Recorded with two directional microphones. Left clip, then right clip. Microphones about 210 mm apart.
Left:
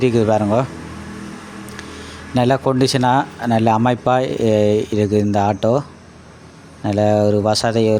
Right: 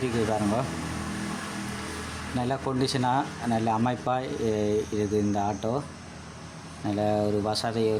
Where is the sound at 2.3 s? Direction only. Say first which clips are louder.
Left 13 dB; 35° left (ahead or behind).